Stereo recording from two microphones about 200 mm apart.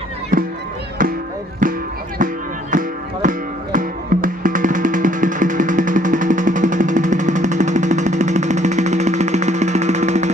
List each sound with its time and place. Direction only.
1.6 s music: 40° right (ahead or behind)